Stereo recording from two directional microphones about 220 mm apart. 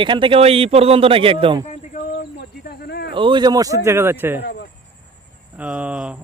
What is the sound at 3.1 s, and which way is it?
Speech, 20° right (ahead or behind).